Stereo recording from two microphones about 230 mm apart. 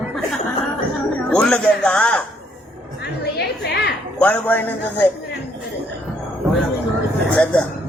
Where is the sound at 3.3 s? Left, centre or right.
Left.